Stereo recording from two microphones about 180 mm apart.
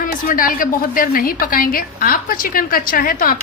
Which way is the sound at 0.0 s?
50° left (ahead or behind).